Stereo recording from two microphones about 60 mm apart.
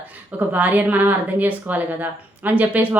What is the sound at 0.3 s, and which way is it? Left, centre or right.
Speech, right.